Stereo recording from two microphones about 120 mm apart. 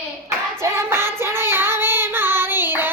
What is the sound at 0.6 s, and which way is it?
Child singing, 20° right (ahead or behind).